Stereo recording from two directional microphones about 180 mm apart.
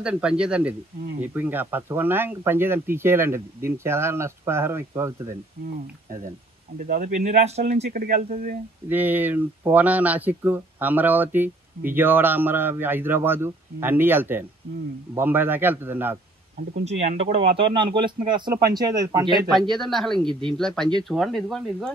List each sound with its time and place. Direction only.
0.0 s speech: 5° right (ahead or behind)
6.9 s speech: 50° right (ahead or behind)
8.8 s speech: 10° right (ahead or behind)
16.8 s speech: 40° right (ahead or behind); by 19.4 s 20° right (ahead or behind)
19.7 s speech: centre (ahead or behind)